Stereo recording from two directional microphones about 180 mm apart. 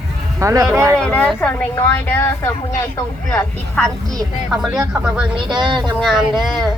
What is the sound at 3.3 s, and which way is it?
Speech, 5° left (ahead or behind).